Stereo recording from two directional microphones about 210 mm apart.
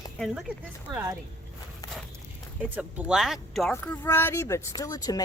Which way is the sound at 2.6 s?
5° right (ahead or behind).